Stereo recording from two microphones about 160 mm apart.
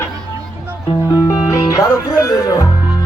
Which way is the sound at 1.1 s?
20° left (ahead or behind).